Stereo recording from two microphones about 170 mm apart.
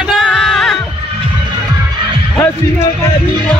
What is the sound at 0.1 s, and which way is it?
Music, centre (ahead or behind).